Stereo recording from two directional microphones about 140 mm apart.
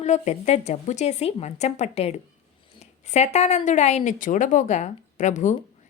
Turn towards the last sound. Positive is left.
turn(degrees=60)  # may be behind; listen again after turning